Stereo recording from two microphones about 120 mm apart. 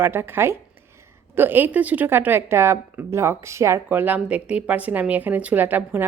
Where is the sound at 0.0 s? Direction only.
20° right (ahead or behind).